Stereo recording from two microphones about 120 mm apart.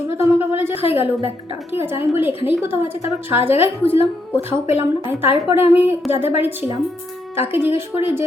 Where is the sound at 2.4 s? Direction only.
15° right (ahead or behind).